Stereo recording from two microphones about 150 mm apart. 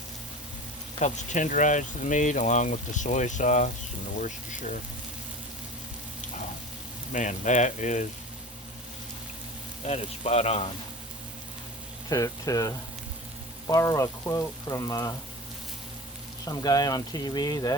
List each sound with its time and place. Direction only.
0.9 s speech: 55° left (ahead or behind)
7.1 s speech: 55° left (ahead or behind)
9.8 s speech: 45° left (ahead or behind)
12.0 s frying: 20° left (ahead or behind)
16.5 s frying: 25° left (ahead or behind)